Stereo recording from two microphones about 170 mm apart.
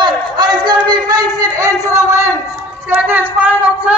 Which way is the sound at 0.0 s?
25° right (ahead or behind).